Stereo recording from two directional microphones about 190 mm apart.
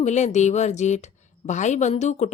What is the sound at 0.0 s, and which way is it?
Speech, 40° left (ahead or behind).